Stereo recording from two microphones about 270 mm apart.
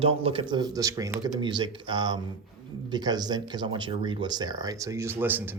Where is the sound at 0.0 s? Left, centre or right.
Right.